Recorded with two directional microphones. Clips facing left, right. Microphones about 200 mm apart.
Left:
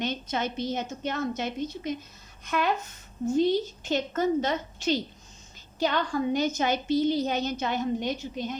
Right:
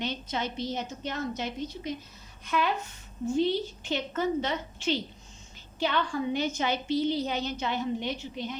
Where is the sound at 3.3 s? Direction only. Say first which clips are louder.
Left 3 dB; 40° left (ahead or behind).